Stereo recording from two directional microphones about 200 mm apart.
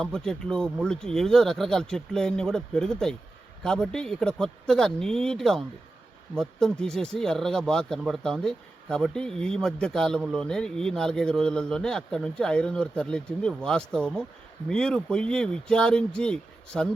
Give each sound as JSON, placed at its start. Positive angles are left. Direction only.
{"t": 0.0, "sound": "speech", "side_deg": 5}